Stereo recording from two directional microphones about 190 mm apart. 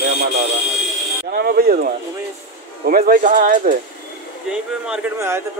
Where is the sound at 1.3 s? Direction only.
55° right (ahead or behind).